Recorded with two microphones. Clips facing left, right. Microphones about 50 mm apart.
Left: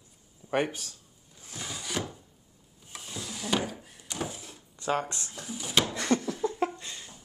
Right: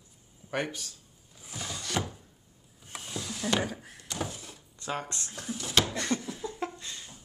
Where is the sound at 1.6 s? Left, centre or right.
Centre.